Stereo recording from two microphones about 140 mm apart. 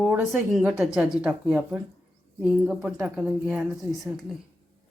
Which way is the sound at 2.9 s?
5° right (ahead or behind).